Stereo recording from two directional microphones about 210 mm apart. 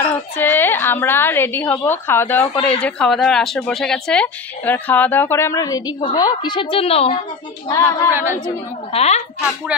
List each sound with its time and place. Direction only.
0.1 s a woman's voice: 10° left (ahead or behind); by 7.2 s 30° left (ahead or behind)
7.6 s a woman's voice: 15° left (ahead or behind)
8.1 s speech: 10° right (ahead or behind)
8.5 s a woman's voice: 30° left (ahead or behind)